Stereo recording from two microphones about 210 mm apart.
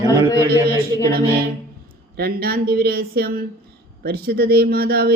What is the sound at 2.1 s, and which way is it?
Speech, 45° right (ahead or behind).